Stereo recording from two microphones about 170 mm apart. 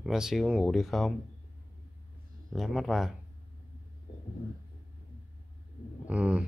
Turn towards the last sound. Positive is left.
turn(degrees=-5)  # may be behind; listen again after turning